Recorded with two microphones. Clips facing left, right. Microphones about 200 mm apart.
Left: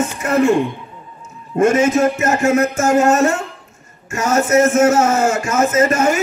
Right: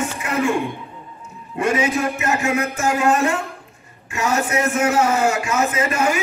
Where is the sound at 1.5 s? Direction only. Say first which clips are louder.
Left 6 dB; 45° left (ahead or behind).